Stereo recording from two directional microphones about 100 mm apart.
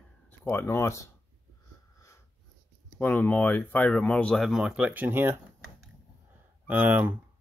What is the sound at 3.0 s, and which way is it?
Speech, 15° left (ahead or behind).